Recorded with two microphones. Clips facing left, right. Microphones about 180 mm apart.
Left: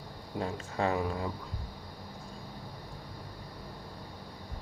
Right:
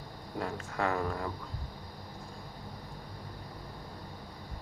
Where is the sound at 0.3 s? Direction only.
20° left (ahead or behind).